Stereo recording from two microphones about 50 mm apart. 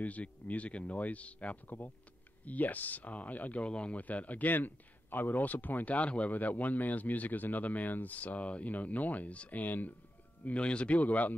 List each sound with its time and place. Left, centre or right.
0.0 s speech: left
10.4 s speech: left